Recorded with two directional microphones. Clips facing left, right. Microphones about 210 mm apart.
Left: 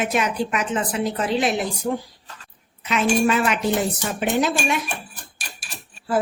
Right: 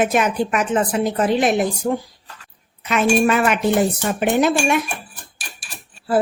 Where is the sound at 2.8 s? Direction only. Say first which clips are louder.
Right 3 dB; 50° right (ahead or behind).